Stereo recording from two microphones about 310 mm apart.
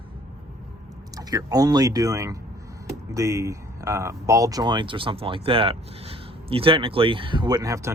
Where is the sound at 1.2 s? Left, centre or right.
Centre.